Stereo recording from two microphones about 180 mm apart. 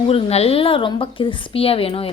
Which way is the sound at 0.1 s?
35° left (ahead or behind).